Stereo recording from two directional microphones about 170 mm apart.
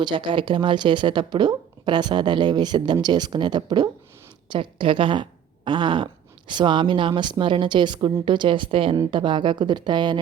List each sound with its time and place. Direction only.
0.0 s speech: 25° right (ahead or behind)